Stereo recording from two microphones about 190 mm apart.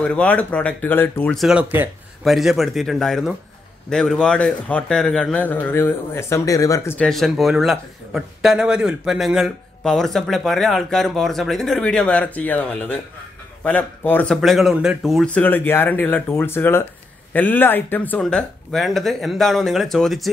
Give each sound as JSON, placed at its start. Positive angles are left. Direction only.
{"t": 0.0, "sound": "a man's voice", "side_deg": 5}
{"t": 7.1, "sound": "a man's voice", "side_deg": 0}